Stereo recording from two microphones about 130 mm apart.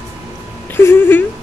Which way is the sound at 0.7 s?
15° left (ahead or behind).